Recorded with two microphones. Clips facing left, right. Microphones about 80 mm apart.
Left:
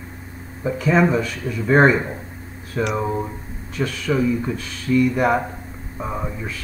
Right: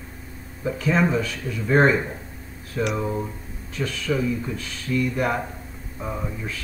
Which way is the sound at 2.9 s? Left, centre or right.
Left.